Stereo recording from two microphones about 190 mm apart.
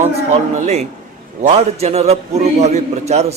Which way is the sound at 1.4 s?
35° right (ahead or behind).